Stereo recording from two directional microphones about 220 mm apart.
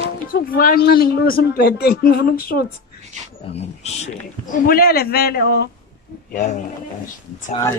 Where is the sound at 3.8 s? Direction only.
35° left (ahead or behind).